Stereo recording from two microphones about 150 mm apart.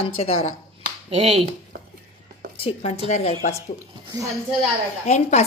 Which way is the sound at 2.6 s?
45° left (ahead or behind).